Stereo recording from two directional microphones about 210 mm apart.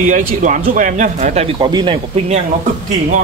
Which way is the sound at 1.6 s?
20° right (ahead or behind).